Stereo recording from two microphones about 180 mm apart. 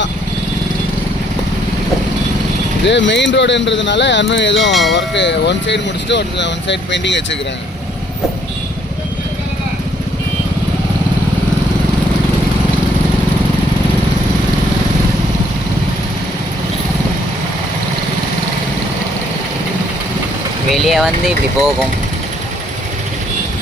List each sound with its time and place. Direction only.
2.8 s speech: 80° left
4.7 s speech: centre (ahead or behind)
4.9 s speech: 80° left
20.7 s speech: centre (ahead or behind)